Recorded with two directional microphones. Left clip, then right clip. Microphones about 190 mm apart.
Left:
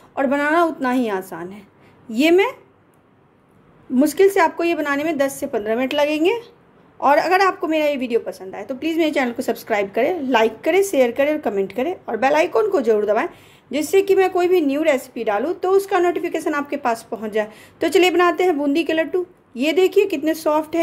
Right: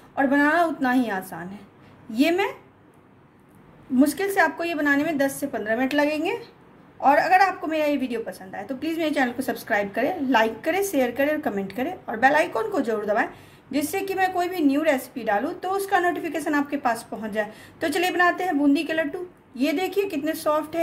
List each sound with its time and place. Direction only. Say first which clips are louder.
0.1 s a woman's voice: left 2 dB; 35° left (ahead or behind)
3.9 s a woman's voice: left 6 dB; 40° left (ahead or behind)